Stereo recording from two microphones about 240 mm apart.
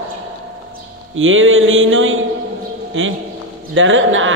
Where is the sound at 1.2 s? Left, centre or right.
Right.